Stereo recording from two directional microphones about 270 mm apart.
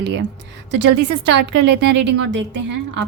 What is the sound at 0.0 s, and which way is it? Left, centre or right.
A woman's voice, right.